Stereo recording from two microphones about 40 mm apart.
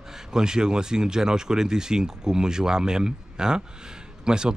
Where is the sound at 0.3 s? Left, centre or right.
Centre.